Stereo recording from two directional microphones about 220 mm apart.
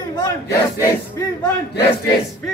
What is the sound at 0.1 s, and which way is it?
Speech, 15° left (ahead or behind).